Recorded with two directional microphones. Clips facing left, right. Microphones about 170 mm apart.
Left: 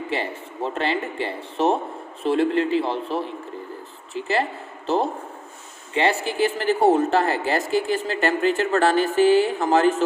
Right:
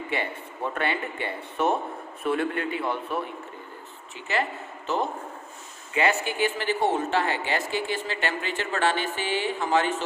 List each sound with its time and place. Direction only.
0.1 s speech: 25° left (ahead or behind)
5.9 s speech: 30° left (ahead or behind)